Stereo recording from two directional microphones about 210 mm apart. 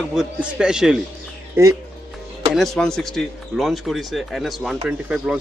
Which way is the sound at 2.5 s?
Centre (ahead or behind).